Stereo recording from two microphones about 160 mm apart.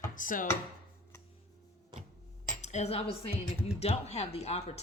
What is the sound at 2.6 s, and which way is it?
Speech, 45° left (ahead or behind).